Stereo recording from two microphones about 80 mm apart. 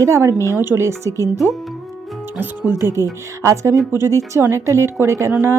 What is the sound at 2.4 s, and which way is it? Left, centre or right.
A woman's voice, right.